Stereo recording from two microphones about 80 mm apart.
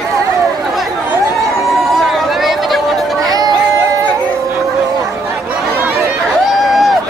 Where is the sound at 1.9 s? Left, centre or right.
Centre.